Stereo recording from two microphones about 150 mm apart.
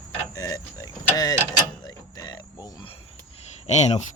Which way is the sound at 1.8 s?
30° left (ahead or behind).